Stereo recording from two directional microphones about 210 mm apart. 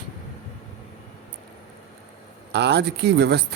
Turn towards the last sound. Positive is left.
turn(degrees=-55)  # may be behind; listen again after turning